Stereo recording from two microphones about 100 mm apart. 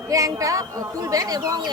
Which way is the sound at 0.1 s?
35° right (ahead or behind).